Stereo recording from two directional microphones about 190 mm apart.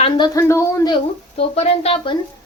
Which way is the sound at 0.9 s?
30° left (ahead or behind).